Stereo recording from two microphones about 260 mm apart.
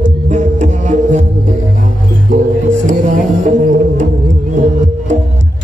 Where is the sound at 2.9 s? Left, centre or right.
Right.